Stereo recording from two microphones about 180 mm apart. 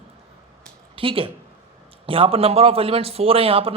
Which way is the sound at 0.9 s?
30° right (ahead or behind).